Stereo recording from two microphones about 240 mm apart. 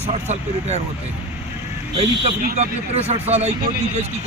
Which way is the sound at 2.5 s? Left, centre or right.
Right.